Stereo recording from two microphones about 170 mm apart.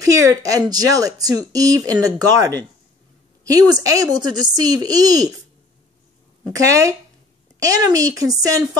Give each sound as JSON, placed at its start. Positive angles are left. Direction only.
{"t": 0.0, "sound": "speech", "side_deg": -20}
{"t": 6.5, "sound": "speech", "side_deg": -20}